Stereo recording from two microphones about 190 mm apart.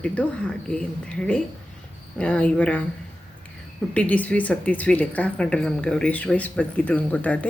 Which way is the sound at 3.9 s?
5° left (ahead or behind).